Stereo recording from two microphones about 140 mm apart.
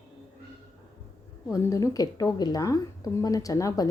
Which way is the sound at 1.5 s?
20° left (ahead or behind).